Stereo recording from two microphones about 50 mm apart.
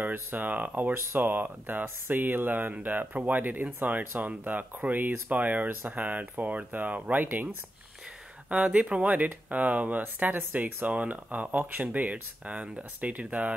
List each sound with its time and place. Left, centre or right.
0.0 s speech: right
8.5 s speech: right
9.1 s speech: right